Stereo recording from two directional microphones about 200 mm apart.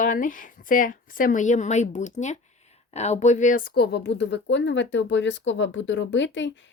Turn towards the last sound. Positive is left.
turn(degrees=65)  # may be behind; listen again after turning